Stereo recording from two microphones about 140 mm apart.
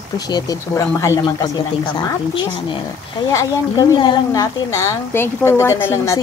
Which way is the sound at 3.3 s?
25° left (ahead or behind).